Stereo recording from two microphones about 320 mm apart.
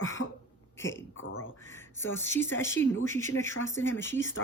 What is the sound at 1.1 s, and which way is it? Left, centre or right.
Speech, left.